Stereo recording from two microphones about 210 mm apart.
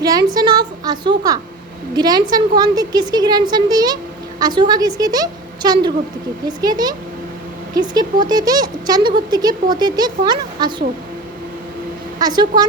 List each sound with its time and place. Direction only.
0.0 s a woman's voice: 20° right (ahead or behind)
12.2 s speech: 20° right (ahead or behind)